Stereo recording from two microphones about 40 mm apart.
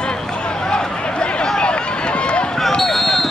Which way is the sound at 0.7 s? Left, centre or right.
Centre.